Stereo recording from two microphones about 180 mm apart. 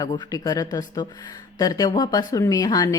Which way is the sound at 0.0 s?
20° left (ahead or behind).